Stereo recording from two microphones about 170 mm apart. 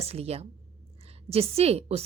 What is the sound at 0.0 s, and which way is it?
A woman's voice, 35° right (ahead or behind).